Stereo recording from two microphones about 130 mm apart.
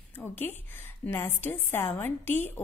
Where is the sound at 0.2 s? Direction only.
15° left (ahead or behind).